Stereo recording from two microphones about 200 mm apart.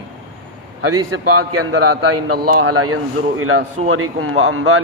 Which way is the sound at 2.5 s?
90° right.